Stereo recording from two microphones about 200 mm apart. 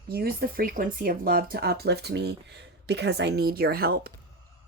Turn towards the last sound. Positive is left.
turn(degrees=-50)  # may be behind; listen again after turning